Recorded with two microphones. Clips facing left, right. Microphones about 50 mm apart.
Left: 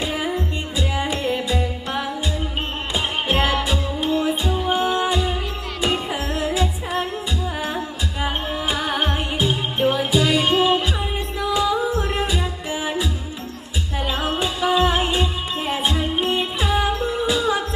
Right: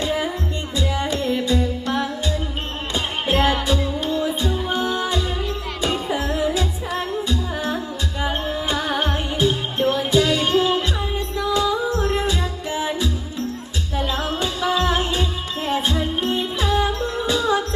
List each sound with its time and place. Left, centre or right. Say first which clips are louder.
0.0 s music: right 1 dB; centre
6.1 s music: right 2 dB; centre
8.2 s music: even; centre